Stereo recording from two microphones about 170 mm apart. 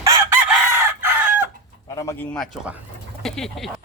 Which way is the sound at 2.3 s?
5° right (ahead or behind).